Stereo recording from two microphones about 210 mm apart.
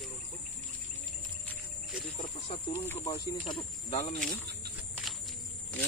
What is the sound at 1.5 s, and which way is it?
Cricket, centre (ahead or behind).